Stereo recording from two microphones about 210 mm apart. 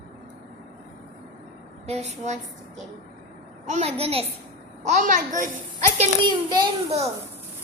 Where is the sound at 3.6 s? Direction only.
30° right (ahead or behind).